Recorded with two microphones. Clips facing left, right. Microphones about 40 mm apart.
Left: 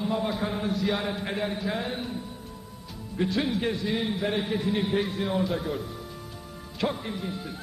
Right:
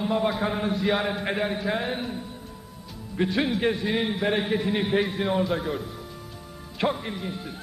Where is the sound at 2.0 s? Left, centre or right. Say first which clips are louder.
Right 2 dB; centre.